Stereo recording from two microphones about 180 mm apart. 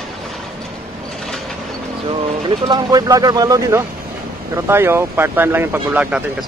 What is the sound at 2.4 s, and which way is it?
Speech, 25° right (ahead or behind).